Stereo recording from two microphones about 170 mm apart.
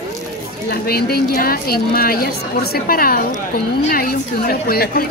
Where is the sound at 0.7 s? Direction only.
65° left (ahead or behind).